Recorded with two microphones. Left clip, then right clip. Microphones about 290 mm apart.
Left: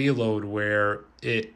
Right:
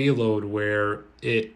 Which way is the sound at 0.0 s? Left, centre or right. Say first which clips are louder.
Right 2 dB; centre.